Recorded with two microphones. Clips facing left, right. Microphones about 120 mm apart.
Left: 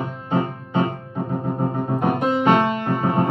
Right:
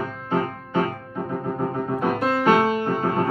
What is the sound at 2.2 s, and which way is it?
Music, 20° left (ahead or behind).